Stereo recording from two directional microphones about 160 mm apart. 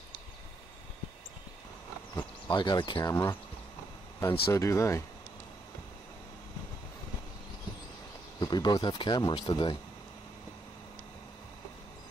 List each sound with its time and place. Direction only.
2.5 s speech: 30° left (ahead or behind)
8.4 s speech: 25° left (ahead or behind)